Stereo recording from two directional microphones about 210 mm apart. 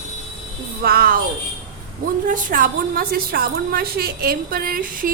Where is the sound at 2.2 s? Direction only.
40° right (ahead or behind).